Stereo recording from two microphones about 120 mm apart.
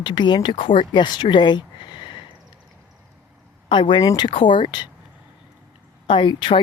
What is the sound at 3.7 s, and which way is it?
Speech, 45° left (ahead or behind).